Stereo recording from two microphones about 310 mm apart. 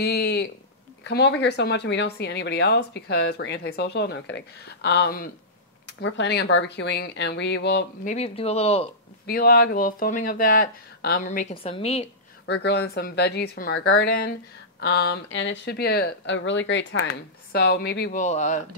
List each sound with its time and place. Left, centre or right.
0.0 s a sound: left
1.0 s speech: left
9.2 s speech: left
12.6 s speech: left